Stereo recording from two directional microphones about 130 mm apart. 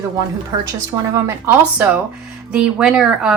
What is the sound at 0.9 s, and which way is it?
A woman's voice, 20° right (ahead or behind).